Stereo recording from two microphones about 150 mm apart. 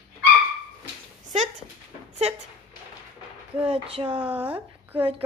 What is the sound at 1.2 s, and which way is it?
Dog, 50° right (ahead or behind).